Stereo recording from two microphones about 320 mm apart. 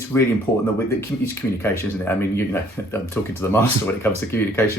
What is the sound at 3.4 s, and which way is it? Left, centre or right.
Speech, centre.